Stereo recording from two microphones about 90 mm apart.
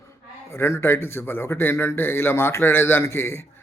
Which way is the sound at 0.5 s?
30° left (ahead or behind).